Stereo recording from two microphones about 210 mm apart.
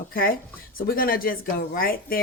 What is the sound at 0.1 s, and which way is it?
Speech, 45° left (ahead or behind).